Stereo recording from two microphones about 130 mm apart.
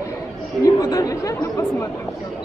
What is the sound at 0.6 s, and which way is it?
Speech, 25° left (ahead or behind).